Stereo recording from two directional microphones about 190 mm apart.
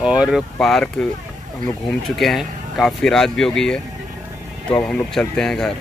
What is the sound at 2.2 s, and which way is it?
Speech, centre (ahead or behind).